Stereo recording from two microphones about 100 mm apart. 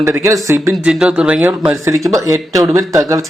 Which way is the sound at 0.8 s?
10° right (ahead or behind).